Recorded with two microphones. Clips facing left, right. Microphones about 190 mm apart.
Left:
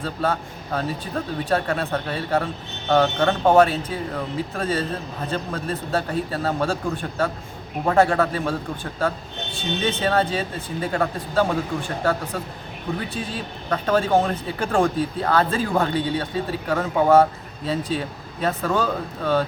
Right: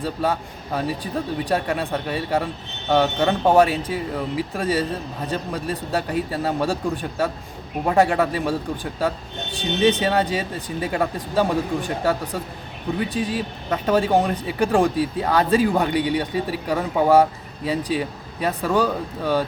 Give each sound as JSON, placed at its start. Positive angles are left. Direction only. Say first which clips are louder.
{"t": 0.0, "sound": "speech", "louder": "right 1 dB", "side_deg": -15}
{"t": 13.1, "sound": "speech", "louder": "right 5 dB", "side_deg": -15}